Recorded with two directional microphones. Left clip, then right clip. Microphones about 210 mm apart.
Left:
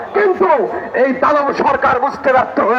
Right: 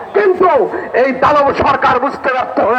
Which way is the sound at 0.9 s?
35° right (ahead or behind).